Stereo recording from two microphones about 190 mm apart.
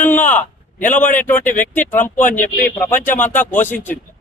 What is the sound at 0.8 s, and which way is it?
Speech, 45° left (ahead or behind).